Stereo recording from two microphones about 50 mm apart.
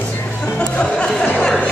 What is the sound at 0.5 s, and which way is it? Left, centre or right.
Music, left.